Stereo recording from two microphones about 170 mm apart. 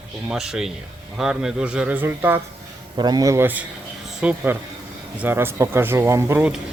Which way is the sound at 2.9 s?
25° right (ahead or behind).